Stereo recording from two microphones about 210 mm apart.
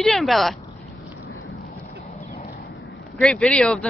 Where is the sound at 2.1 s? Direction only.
40° left (ahead or behind).